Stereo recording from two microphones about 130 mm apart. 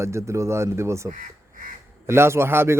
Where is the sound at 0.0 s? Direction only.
20° right (ahead or behind).